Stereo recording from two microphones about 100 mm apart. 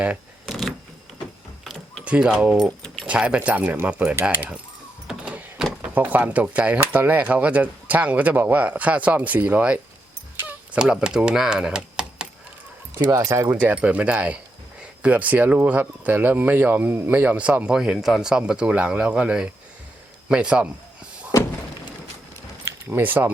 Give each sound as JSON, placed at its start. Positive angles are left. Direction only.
{"t": 0.4, "sound": "a sound", "side_deg": 0}
{"t": 2.0, "sound": "speech", "side_deg": -10}
{"t": 2.6, "sound": "keys jangling", "side_deg": 5}
{"t": 3.1, "sound": "speech", "side_deg": -10}
{"t": 5.0, "sound": "power windows", "side_deg": -10}
{"t": 5.8, "sound": "speech", "side_deg": -15}
{"t": 13.0, "sound": "speech", "side_deg": -35}
{"t": 13.6, "sound": "speech", "side_deg": -15}
{"t": 22.6, "sound": "speech", "side_deg": -20}